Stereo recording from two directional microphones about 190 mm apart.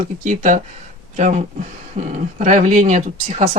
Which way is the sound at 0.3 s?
40° right (ahead or behind).